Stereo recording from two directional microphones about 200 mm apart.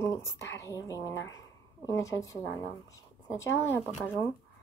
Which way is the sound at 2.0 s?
15° left (ahead or behind).